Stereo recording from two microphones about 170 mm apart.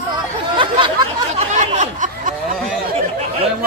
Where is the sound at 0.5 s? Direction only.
30° right (ahead or behind).